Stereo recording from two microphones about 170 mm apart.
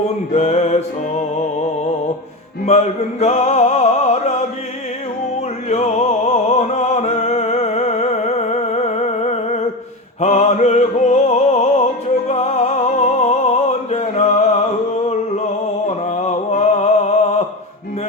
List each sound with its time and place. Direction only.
0.3 s music: 40° left (ahead or behind)
2.6 s music: 40° left (ahead or behind)
5.6 s music: 40° left (ahead or behind)
16.0 s a sound: 40° left (ahead or behind)